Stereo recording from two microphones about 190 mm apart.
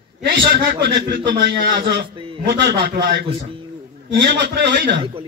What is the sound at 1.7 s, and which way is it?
A man's voice, 55° right (ahead or behind).